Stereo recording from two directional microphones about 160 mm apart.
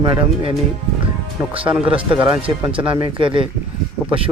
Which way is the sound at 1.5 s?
35° right (ahead or behind).